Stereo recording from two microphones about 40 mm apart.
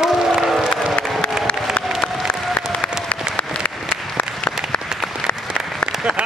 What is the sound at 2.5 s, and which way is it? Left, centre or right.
Applause, left.